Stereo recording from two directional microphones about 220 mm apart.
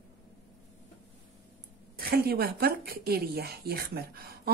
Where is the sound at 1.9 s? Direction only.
45° right (ahead or behind).